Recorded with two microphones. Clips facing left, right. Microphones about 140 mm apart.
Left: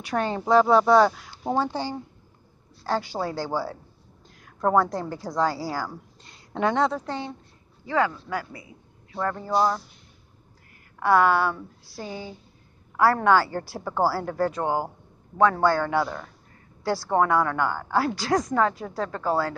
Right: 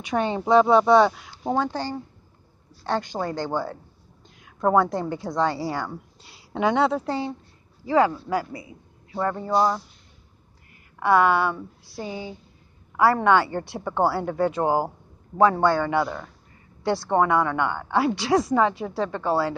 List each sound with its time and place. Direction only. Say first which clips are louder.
0.1 s a woman's voice: right 2 dB; 5° right (ahead or behind)
7.9 s speech: right 4 dB; 30° right (ahead or behind)
9.1 s speech: right 2 dB; 10° right (ahead or behind)
9.4 s a woman's voice: right 1 dB; centre (ahead or behind)
11.2 s a woman's voice: right 1 dB; centre (ahead or behind)